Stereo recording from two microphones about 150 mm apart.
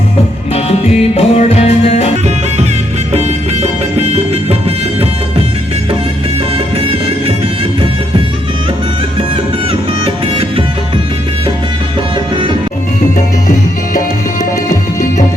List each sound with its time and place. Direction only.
0.5 s music: 45° left (ahead or behind)
3.1 s music: 45° right (ahead or behind)
6.7 s music: 40° right (ahead or behind)